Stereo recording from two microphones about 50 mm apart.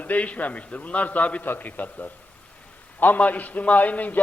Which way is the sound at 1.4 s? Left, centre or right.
Left.